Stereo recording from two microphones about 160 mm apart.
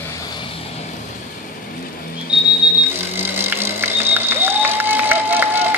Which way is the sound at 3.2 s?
15° right (ahead or behind).